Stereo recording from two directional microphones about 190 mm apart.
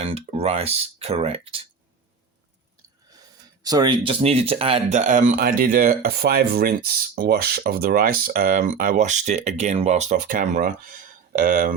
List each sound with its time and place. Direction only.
0.0 s speech: 30° right (ahead or behind)
3.6 s speech: 20° right (ahead or behind); by 11.7 s 50° right (ahead or behind)